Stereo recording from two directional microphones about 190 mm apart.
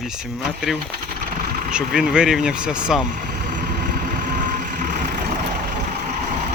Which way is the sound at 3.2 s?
50° right (ahead or behind).